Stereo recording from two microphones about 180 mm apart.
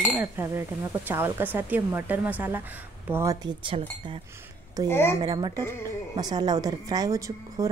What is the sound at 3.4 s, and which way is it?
Speech, 30° right (ahead or behind).